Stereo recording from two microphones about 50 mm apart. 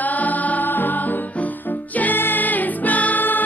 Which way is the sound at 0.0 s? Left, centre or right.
Left.